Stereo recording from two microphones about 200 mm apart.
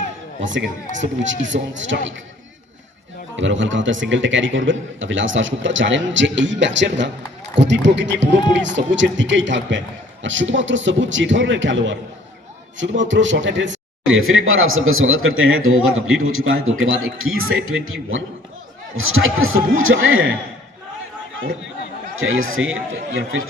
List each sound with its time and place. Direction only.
1.2 s a man's voice: 70° right (ahead or behind)
3.3 s a man's voice: 65° right (ahead or behind); by 20.2 s 85° right
22.2 s speech: 85° right